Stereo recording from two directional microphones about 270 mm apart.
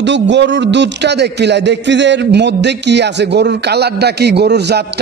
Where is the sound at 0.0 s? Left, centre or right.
Right.